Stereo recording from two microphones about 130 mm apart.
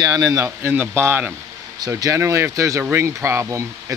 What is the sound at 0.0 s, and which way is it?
Speech, 30° right (ahead or behind).